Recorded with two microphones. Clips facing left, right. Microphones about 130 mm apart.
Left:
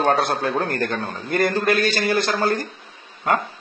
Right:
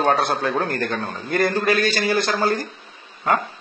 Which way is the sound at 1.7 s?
Centre (ahead or behind).